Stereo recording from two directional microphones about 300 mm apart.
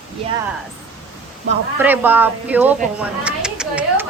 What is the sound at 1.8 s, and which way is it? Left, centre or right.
A woman's voice, centre.